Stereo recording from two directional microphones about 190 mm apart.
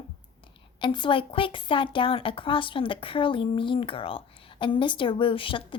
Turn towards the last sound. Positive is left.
turn(degrees=25)  # may be behind; listen again after turning